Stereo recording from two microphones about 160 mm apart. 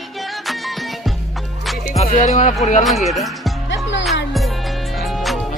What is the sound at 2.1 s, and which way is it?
Speech, 50° left (ahead or behind).